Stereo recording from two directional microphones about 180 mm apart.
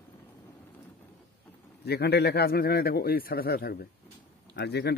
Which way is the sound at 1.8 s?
65° left (ahead or behind).